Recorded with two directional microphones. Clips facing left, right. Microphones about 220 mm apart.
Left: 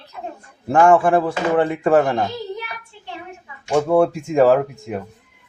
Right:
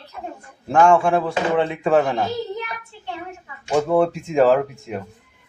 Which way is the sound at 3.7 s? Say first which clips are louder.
Left 2 dB; centre (ahead or behind).